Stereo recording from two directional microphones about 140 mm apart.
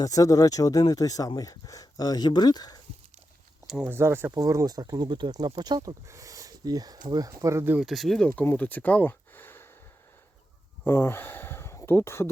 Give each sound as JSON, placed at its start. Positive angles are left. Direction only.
{"t": 0.0, "sound": "speech", "side_deg": 25}
{"t": 3.8, "sound": "speech", "side_deg": -15}
{"t": 7.8, "sound": "speech", "side_deg": 0}
{"t": 10.8, "sound": "speech", "side_deg": 15}